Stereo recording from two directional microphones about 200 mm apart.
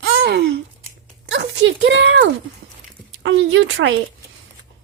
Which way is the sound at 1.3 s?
65° right (ahead or behind).